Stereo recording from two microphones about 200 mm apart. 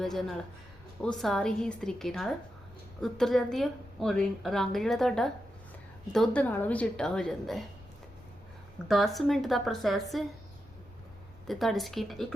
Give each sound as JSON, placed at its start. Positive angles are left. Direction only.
{"t": 0.0, "sound": "a woman's voice", "side_deg": 0}
{"t": 8.9, "sound": "a woman's voice", "side_deg": 0}
{"t": 11.4, "sound": "a woman's voice", "side_deg": 0}